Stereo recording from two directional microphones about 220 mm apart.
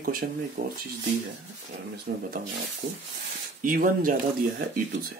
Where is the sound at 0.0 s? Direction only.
40° right (ahead or behind).